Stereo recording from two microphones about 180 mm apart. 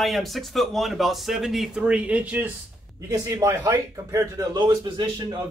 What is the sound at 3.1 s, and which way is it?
Speech, 20° right (ahead or behind).